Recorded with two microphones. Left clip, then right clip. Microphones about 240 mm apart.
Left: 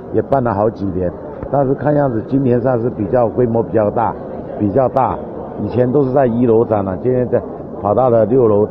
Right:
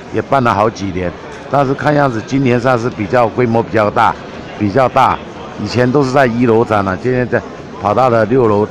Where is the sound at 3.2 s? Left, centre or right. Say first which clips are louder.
Right 2 dB; right.